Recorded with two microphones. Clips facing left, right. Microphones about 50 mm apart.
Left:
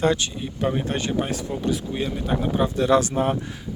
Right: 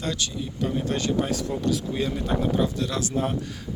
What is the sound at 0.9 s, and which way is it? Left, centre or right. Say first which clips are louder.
Speech: even; left.